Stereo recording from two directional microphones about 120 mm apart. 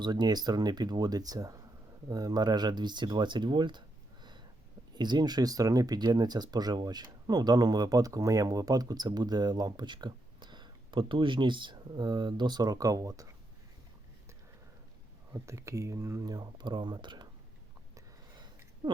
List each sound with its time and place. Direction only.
0.0 s speech: 35° right (ahead or behind)
15.3 s speech: 25° right (ahead or behind)
16.2 s speech: 35° right (ahead or behind)